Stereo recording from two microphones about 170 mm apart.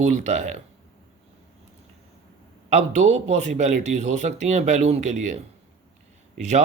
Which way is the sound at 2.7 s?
40° right (ahead or behind).